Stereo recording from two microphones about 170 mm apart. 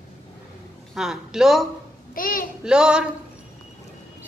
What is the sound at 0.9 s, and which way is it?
Speech, 5° right (ahead or behind).